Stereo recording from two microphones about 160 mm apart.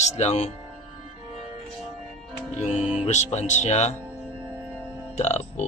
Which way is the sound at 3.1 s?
45° left (ahead or behind).